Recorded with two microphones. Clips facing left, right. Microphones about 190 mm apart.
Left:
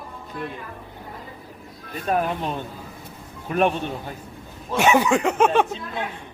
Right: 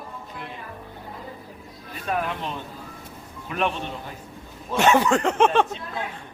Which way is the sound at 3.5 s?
45° left (ahead or behind).